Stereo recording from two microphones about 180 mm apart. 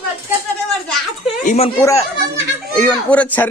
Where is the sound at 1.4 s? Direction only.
45° left (ahead or behind).